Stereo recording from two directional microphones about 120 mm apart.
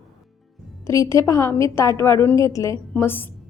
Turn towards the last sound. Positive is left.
turn(degrees=15)  # may be behind; listen again after turning